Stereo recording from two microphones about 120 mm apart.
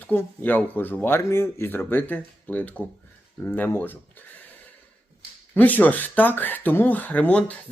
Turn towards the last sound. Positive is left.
turn(degrees=10)  # may be behind; listen again after turning